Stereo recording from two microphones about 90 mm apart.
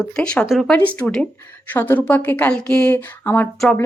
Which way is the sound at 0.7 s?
15° left (ahead or behind).